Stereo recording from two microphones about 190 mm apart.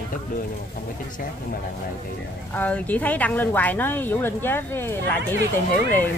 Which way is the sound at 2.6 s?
10° left (ahead or behind).